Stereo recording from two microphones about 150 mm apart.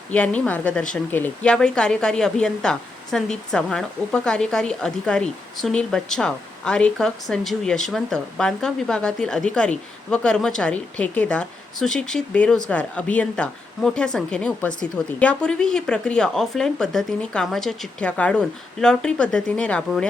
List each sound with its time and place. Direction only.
0.1 s a woman's voice: 10° left (ahead or behind)